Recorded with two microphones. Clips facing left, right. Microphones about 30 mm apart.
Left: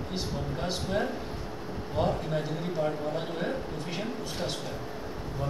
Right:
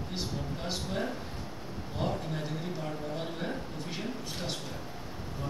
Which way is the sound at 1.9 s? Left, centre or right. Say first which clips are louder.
Left 6 dB; centre.